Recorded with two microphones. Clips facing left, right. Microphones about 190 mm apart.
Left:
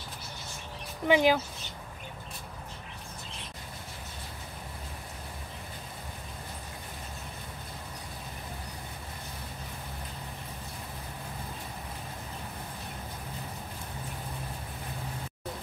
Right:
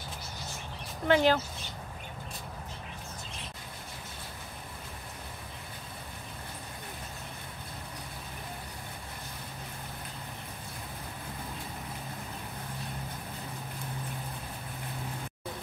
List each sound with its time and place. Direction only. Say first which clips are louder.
1.0 s speech: left 1 dB; 10° left (ahead or behind)